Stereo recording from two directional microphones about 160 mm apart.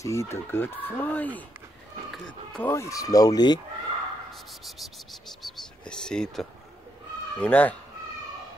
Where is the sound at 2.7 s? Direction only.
20° left (ahead or behind).